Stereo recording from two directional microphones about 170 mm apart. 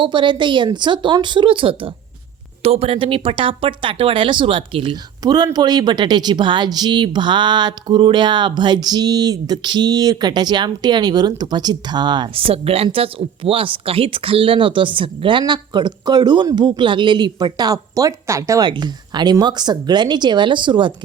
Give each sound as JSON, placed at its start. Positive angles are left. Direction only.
{"t": 0.0, "sound": "speech", "side_deg": -30}